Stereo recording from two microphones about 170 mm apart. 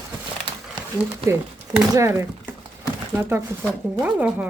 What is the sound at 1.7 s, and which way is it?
Speech, 15° right (ahead or behind).